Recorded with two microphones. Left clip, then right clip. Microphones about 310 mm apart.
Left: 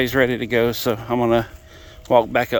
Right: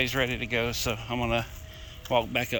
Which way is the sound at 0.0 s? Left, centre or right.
Left.